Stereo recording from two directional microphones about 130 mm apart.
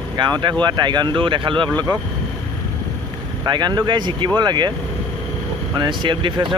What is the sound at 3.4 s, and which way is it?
Speech, 35° right (ahead or behind).